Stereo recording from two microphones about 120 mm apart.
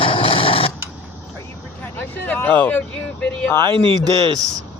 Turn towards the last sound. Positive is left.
turn(degrees=-45)  # may be behind; listen again after turning